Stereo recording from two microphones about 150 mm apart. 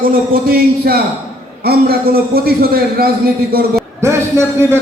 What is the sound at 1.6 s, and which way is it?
A man's voice, 90° right.